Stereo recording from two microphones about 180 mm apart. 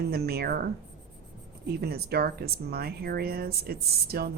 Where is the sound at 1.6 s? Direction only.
60° right (ahead or behind).